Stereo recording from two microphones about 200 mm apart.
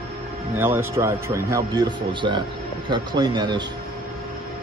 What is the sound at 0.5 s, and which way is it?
A man's voice, 10° right (ahead or behind).